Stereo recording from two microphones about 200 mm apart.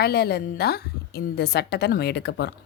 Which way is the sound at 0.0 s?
50° left (ahead or behind).